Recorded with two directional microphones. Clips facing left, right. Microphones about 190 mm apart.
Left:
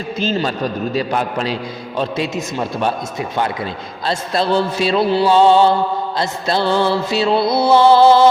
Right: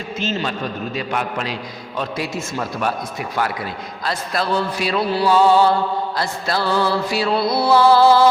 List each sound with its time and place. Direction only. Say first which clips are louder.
0.2 s a man's voice: left 4 dB; 35° left (ahead or behind)